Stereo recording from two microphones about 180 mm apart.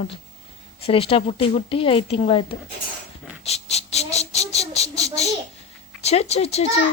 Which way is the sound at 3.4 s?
35° left (ahead or behind).